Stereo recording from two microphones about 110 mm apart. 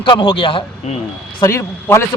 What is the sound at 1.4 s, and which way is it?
Speech, 25° left (ahead or behind).